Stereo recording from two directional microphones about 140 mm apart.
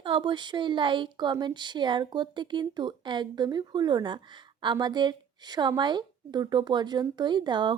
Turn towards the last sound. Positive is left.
turn(degrees=-35)  # may be behind; listen again after turning